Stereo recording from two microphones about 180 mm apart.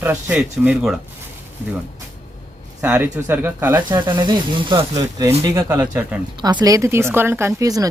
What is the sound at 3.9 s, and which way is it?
Speech, 25° right (ahead or behind).